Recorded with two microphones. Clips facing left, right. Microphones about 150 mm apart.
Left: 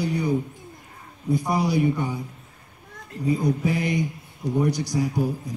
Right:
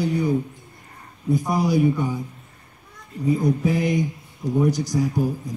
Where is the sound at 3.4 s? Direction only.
Centre (ahead or behind).